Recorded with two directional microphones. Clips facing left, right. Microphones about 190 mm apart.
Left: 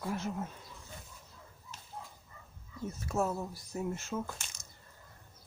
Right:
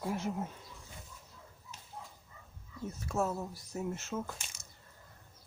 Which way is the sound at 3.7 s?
5° right (ahead or behind).